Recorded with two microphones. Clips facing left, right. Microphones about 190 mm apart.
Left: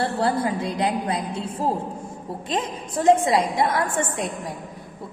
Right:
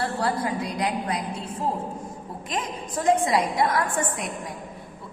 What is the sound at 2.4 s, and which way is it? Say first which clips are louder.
A woman's voice: left 3 dB; 30° left (ahead or behind).